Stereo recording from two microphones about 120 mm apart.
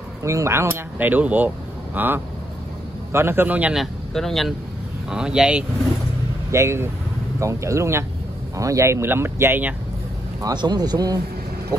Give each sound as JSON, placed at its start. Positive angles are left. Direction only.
{"t": 0.2, "sound": "a man's voice", "side_deg": -25}
{"t": 3.7, "sound": "a man's voice", "side_deg": 0}
{"t": 6.5, "sound": "speech", "side_deg": -25}
{"t": 10.4, "sound": "speech", "side_deg": -35}